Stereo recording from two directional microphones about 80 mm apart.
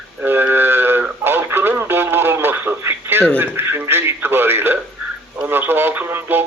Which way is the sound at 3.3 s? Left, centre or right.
Right.